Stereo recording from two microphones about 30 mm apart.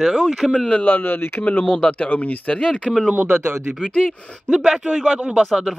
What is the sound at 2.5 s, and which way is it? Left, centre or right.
Speech, left.